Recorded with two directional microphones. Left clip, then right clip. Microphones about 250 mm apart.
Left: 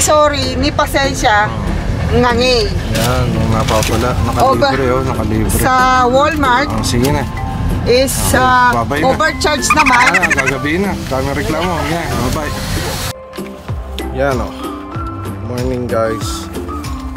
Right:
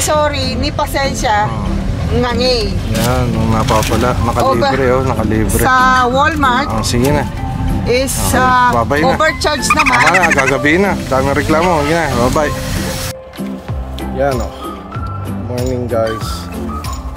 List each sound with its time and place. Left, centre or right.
0.0 s speech: centre
14.2 s speech: centre